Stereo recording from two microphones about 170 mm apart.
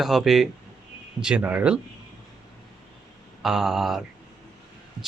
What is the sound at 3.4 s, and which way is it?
Speech, centre (ahead or behind).